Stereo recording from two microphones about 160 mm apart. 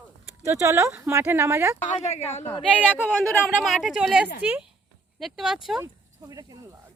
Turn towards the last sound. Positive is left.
turn(degrees=-20)  # may be behind; listen again after turning